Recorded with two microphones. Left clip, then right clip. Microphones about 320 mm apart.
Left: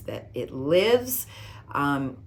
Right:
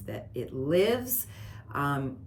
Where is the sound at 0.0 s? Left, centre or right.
Centre.